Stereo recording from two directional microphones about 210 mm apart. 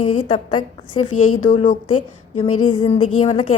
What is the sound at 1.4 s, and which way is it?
Speech, 40° left (ahead or behind).